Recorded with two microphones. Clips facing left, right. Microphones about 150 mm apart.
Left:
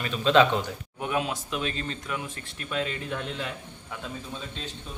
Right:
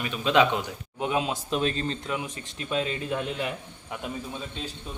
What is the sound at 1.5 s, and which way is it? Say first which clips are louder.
Speech: right 7 dB; 35° right (ahead or behind).